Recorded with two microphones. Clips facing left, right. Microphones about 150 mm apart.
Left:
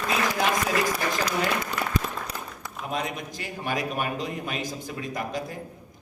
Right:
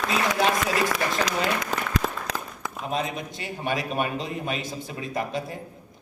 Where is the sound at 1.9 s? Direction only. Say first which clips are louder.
Right 2 dB; 90° right.